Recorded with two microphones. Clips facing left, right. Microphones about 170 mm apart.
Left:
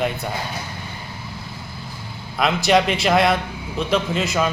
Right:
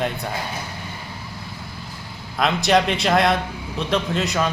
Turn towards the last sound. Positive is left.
turn(degrees=0)  # may be behind; listen again after turning